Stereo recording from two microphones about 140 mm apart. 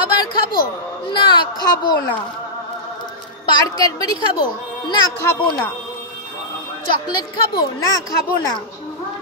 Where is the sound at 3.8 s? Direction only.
25° left (ahead or behind).